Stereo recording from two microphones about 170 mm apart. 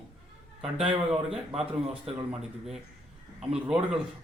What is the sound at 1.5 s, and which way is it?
Speech, 35° right (ahead or behind).